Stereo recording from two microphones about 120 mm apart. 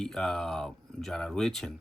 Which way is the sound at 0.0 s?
5° left (ahead or behind).